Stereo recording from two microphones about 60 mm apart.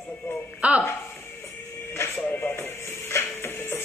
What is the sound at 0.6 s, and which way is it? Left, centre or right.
Speech, right.